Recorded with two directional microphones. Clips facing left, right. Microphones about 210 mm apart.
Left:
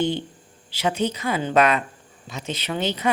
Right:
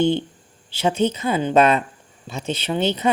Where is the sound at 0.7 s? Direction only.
25° right (ahead or behind).